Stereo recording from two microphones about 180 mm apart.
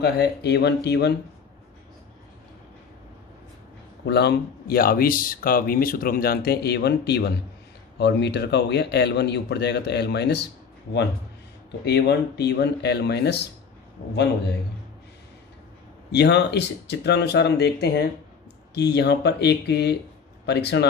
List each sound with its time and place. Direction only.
0.0 s speech: 65° left (ahead or behind)
4.0 s speech: 70° left (ahead or behind)
11.9 s speech: 65° left (ahead or behind)
16.1 s speech: 70° left (ahead or behind)